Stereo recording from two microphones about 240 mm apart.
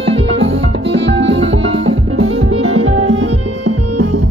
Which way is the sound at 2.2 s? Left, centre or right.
Right.